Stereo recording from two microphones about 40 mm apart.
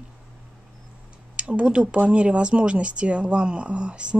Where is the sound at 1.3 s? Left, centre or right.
Right.